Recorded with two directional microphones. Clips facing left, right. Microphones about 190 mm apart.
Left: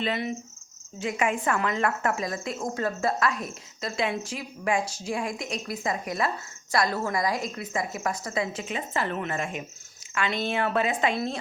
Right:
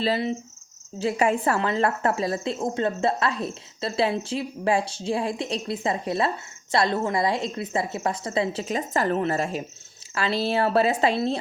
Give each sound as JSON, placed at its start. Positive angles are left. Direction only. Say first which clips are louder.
{"t": 0.0, "sound": "speech", "louder": "right 4 dB", "side_deg": -30}